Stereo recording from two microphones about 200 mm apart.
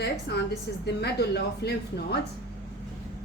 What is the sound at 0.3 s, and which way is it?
A woman's voice, 55° left (ahead or behind).